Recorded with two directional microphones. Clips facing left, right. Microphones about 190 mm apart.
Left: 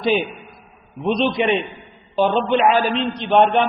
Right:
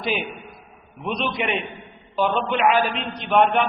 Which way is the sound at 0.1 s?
30° left (ahead or behind).